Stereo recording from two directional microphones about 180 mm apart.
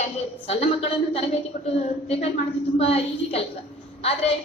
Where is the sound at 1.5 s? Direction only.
45° left (ahead or behind).